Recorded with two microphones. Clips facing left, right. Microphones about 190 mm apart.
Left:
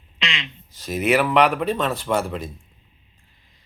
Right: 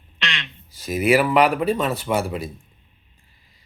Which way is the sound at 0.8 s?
5° right (ahead or behind).